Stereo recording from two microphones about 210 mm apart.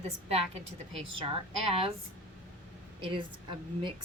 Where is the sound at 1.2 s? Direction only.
25° right (ahead or behind).